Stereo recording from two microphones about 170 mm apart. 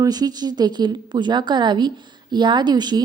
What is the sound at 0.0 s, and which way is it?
A woman's voice, 25° right (ahead or behind).